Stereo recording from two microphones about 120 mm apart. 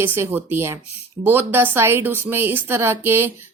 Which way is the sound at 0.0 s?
20° right (ahead or behind).